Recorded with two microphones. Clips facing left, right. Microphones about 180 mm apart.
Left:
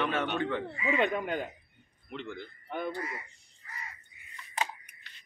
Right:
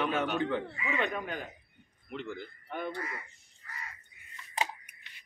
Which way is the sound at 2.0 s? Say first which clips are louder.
Right 1 dB; 5° right (ahead or behind).